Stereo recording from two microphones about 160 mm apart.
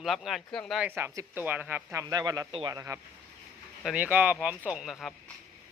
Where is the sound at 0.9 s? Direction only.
15° right (ahead or behind); by 2.7 s 30° right (ahead or behind).